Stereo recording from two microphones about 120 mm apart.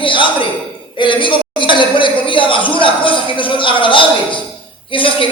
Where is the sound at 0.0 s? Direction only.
45° left (ahead or behind).